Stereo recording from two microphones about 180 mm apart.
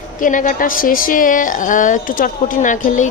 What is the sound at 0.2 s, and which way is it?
A woman's voice, 45° left (ahead or behind).